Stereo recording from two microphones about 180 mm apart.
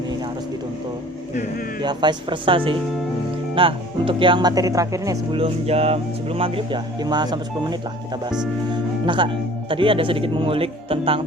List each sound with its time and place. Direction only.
1.8 s speech: 25° right (ahead or behind)
5.4 s speech: 35° right (ahead or behind)